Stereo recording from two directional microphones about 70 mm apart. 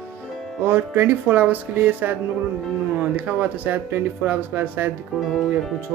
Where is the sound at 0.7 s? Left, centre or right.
Right.